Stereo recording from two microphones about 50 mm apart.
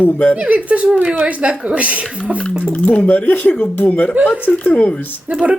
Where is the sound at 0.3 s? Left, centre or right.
Right.